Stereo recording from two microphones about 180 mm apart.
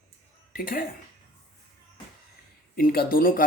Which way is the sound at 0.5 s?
50° left (ahead or behind).